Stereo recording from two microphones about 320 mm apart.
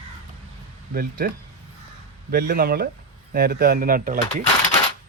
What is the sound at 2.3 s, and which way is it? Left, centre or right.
Speech, right.